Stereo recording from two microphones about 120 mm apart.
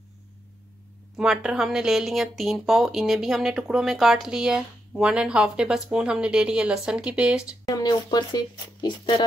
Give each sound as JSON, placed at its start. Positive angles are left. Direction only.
{"t": 1.1, "sound": "speech", "side_deg": -5}
{"t": 7.6, "sound": "speech", "side_deg": 30}